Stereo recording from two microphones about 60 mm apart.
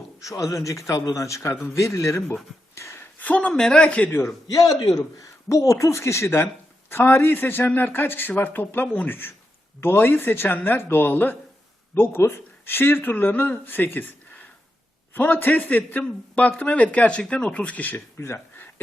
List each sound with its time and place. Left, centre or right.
0.2 s a man's voice: left
2.7 s a sound: left
3.0 s a sound: left
3.5 s a man's voice: centre
4.1 s speech: left
4.5 s a man's voice: left